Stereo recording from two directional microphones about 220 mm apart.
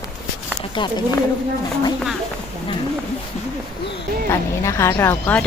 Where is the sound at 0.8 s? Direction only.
20° left (ahead or behind).